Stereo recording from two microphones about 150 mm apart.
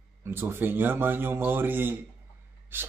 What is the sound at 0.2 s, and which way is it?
Speech, 15° right (ahead or behind).